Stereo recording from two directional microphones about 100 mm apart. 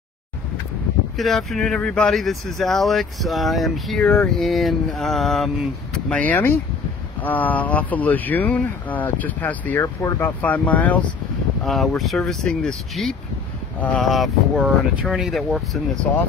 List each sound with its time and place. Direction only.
1.1 s speech: centre (ahead or behind)
11.6 s speech: centre (ahead or behind)